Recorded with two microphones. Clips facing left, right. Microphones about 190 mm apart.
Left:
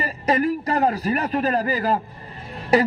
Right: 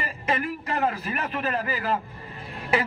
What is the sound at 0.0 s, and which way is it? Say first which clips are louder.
A man's voice: left 7 dB; 40° left (ahead or behind).